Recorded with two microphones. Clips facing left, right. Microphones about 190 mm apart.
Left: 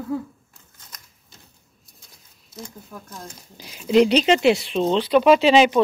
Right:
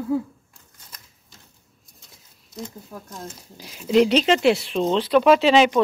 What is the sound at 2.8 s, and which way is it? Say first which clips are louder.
Female singing: right 1 dB; 15° right (ahead or behind).